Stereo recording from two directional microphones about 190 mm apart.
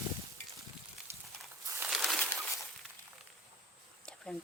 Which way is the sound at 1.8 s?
Centre (ahead or behind).